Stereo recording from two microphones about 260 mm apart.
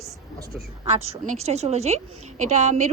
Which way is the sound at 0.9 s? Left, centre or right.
Right.